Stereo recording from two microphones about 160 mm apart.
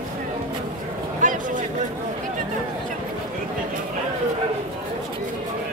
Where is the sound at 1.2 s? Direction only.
55° right (ahead or behind).